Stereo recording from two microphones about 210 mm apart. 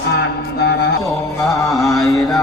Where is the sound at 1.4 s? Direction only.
Centre (ahead or behind).